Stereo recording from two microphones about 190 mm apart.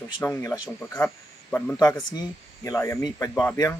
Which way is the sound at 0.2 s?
15° left (ahead or behind).